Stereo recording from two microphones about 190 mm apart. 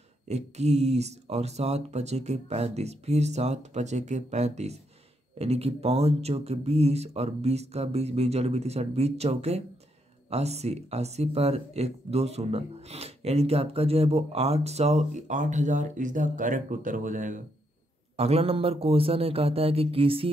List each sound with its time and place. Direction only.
0.3 s speech: 35° right (ahead or behind)
18.1 s speech: 35° right (ahead or behind)